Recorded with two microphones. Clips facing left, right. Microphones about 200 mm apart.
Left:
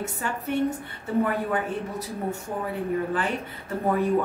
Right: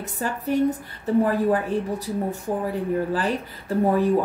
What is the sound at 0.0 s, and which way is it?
A woman's voice, 35° right (ahead or behind).